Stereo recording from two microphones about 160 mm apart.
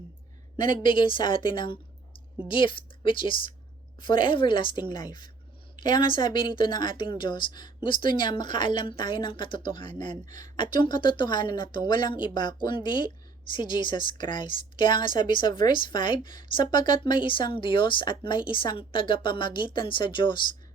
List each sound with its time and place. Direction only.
0.8 s a woman's voice: 30° left (ahead or behind)